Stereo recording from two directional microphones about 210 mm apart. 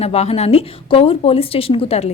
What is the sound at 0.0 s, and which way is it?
A woman's voice, 30° left (ahead or behind).